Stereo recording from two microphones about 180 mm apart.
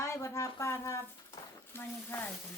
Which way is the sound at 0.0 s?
15° left (ahead or behind).